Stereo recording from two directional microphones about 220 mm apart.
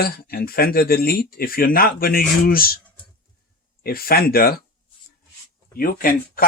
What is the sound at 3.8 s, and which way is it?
Speech, 45° left (ahead or behind).